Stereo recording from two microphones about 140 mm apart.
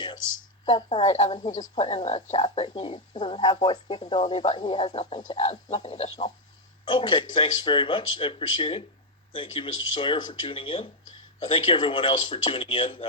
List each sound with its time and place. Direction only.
0.6 s speech: 30° left (ahead or behind)
1.0 s speech: 50° left (ahead or behind)
1.7 s speech: 35° left (ahead or behind)